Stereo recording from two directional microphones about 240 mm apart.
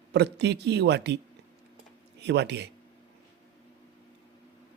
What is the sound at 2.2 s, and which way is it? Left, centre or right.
Speech, right.